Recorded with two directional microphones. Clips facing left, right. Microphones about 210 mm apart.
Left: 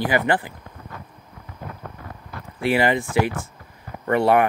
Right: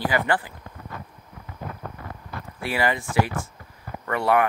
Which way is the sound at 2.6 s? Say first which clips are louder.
Left 6 dB; 20° left (ahead or behind).